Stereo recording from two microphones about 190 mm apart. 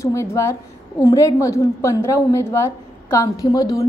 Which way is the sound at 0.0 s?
15° left (ahead or behind).